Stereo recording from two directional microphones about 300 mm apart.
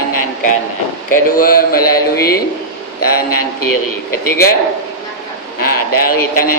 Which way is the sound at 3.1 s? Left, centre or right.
Left.